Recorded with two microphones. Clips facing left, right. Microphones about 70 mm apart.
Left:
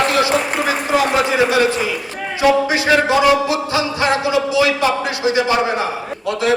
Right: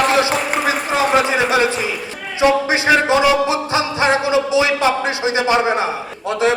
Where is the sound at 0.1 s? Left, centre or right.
Right.